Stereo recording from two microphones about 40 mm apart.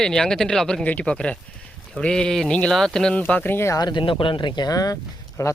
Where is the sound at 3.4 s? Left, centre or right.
Left.